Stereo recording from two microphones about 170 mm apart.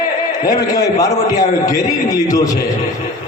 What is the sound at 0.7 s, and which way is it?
A man's voice, 20° left (ahead or behind).